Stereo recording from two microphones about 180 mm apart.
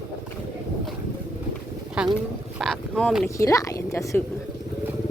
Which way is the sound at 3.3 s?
20° left (ahead or behind).